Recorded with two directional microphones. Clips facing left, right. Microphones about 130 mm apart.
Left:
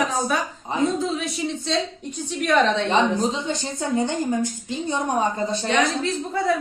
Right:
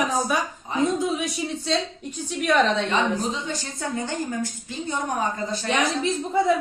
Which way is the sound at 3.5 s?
25° left (ahead or behind).